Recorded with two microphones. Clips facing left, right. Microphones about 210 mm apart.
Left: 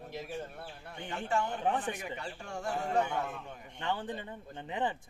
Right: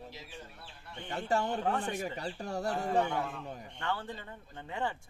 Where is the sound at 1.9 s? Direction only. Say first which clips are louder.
Right 4 dB; 40° right (ahead or behind).